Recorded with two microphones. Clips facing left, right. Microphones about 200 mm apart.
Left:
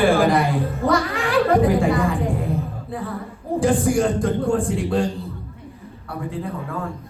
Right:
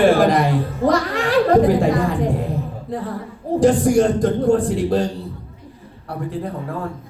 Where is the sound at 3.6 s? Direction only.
40° right (ahead or behind).